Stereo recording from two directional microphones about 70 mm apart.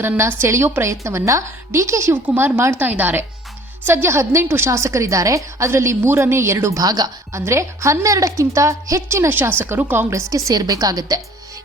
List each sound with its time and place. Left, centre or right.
0.2 s a woman's voice: right
2.2 s a woman's voice: right
6.8 s a woman's voice: right
7.3 s a woman's voice: right
10.1 s a woman's voice: right